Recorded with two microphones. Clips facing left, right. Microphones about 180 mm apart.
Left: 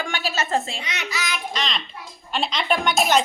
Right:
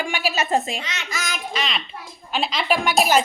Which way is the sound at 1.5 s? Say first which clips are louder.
Right 1 dB; 5° right (ahead or behind).